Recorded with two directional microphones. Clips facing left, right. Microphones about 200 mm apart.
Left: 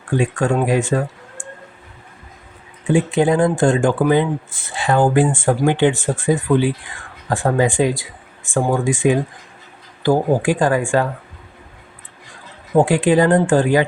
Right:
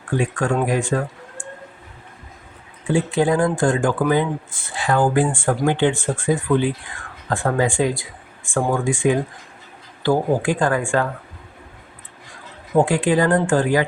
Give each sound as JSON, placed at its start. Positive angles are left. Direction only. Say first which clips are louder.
{"t": 0.2, "sound": "speech", "louder": "left 3 dB", "side_deg": 25}
{"t": 2.8, "sound": "speech", "louder": "left 3 dB", "side_deg": 20}
{"t": 12.7, "sound": "speech", "louder": "left 3 dB", "side_deg": 20}